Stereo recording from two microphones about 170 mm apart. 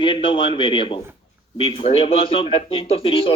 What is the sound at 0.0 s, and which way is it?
Speech, 30° left (ahead or behind).